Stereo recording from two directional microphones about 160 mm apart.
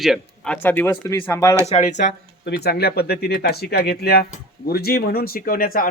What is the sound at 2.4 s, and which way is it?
Speech, 90° left.